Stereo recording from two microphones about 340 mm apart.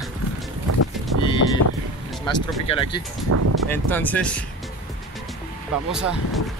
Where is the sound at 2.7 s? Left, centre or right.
Centre.